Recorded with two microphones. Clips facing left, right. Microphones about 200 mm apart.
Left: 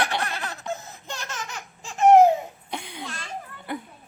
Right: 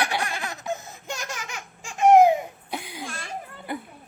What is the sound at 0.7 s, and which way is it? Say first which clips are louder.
Laughter: right 2 dB; 10° right (ahead or behind).